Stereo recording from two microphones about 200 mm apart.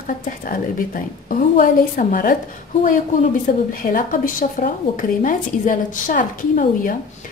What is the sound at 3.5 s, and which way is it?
A woman's voice, 45° left (ahead or behind).